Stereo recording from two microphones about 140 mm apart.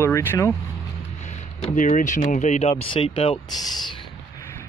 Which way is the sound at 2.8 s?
40° left (ahead or behind).